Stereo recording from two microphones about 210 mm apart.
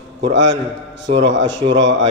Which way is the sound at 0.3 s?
60° right (ahead or behind).